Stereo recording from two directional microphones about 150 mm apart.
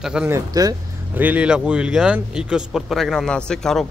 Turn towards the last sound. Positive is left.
turn(degrees=5)  # may be behind; listen again after turning